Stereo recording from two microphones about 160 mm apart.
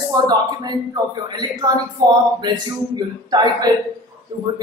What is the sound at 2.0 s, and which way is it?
Speech, 25° right (ahead or behind).